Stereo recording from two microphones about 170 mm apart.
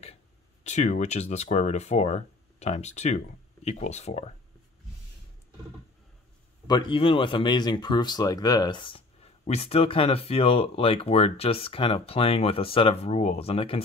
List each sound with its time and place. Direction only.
0.7 s speech: 45° left (ahead or behind)
6.7 s speech: 30° left (ahead or behind)